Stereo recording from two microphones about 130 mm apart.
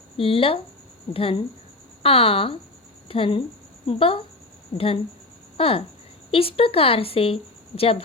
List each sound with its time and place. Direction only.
0.2 s speech: 45° left (ahead or behind)